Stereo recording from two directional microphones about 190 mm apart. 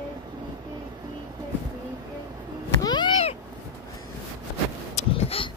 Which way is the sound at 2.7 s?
20° left (ahead or behind).